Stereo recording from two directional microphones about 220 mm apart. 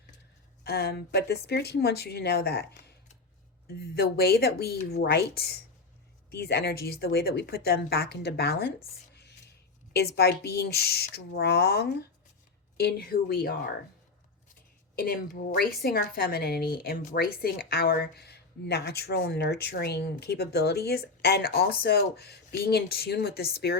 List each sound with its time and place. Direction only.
0.6 s a woman's voice: 45° left (ahead or behind)
9.9 s a woman's voice: 45° left (ahead or behind)
14.9 s a woman's voice: 40° left (ahead or behind)